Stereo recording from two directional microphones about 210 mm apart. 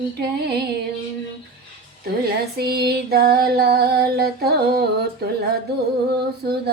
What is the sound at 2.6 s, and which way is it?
Female singing, 50° right (ahead or behind).